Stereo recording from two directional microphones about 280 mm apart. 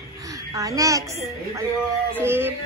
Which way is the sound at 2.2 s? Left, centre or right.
Centre.